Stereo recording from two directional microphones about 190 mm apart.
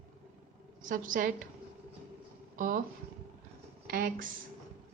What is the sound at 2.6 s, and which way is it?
Speech, 45° right (ahead or behind).